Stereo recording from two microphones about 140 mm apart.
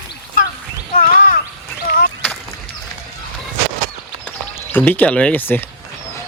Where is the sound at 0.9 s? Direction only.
85° left.